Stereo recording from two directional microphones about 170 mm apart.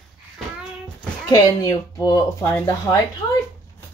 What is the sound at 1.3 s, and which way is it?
Speech, 20° left (ahead or behind).